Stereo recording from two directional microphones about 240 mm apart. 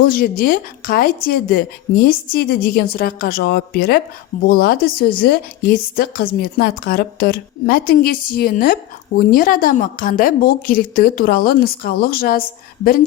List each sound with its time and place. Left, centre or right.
0.0 s speech: left